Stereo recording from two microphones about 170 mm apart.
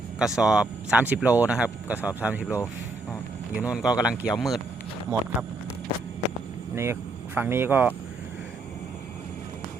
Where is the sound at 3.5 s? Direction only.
5° right (ahead or behind).